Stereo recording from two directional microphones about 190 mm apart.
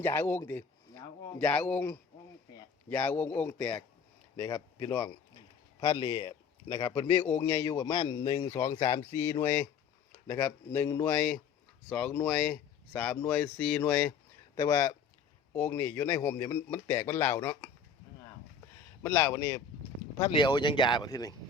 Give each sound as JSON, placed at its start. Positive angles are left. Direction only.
{"t": 0.0, "sound": "a man's voice", "side_deg": 10}
{"t": 7.3, "sound": "a man's voice", "side_deg": 10}
{"t": 19.0, "sound": "a man's voice", "side_deg": 15}